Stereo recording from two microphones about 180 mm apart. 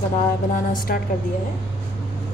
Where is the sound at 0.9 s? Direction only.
50° left (ahead or behind).